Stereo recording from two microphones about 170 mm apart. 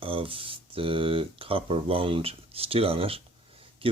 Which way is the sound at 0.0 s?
30° right (ahead or behind).